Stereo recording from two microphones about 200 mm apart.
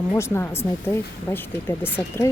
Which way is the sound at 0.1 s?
15° left (ahead or behind).